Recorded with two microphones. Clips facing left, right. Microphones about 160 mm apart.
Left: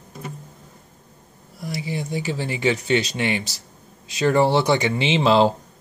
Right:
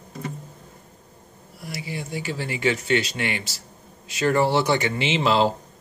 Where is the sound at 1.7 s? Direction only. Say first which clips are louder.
Left 4 dB; 20° left (ahead or behind).